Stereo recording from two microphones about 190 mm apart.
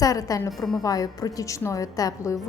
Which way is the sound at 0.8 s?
20° left (ahead or behind).